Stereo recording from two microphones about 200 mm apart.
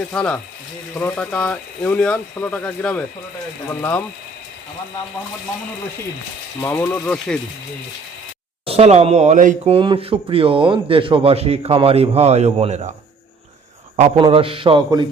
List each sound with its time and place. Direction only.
0.1 s speech: 10° left (ahead or behind)
6.6 s speech: 10° left (ahead or behind)
8.6 s speech: 30° right (ahead or behind)
9.7 s a man's voice: 25° right (ahead or behind)
13.9 s a man's voice: 30° right (ahead or behind)